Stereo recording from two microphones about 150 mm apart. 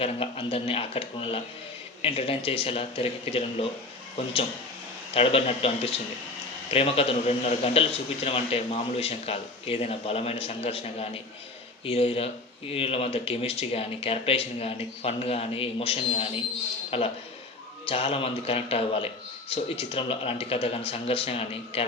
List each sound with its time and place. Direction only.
0.0 s a man's voice: 40° left (ahead or behind)